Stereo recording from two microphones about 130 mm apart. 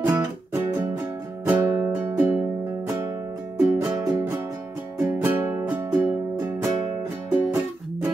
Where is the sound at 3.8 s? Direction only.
25° right (ahead or behind).